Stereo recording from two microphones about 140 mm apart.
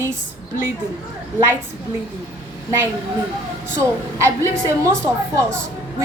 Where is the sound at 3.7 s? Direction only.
20° right (ahead or behind).